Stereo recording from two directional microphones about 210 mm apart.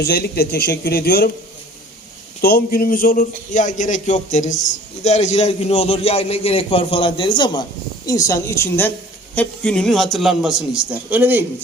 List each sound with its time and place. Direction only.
0.0 s speech: 45° left (ahead or behind)
2.4 s a man's voice: 45° left (ahead or behind); by 11.4 s 10° right (ahead or behind)